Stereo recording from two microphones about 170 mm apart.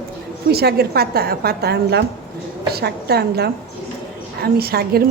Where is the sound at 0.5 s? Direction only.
70° right (ahead or behind).